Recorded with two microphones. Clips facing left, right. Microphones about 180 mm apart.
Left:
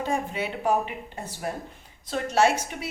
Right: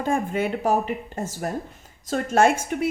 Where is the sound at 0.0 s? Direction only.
50° right (ahead or behind).